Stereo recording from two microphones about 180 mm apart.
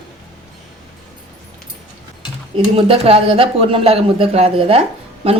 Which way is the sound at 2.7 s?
30° right (ahead or behind).